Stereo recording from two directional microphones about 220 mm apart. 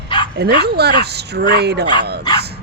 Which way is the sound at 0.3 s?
45° right (ahead or behind).